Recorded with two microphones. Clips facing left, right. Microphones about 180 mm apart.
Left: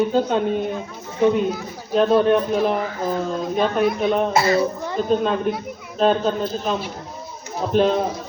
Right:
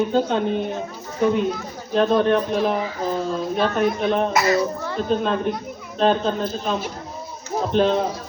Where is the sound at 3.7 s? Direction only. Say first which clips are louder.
Left 1 dB; 5° left (ahead or behind).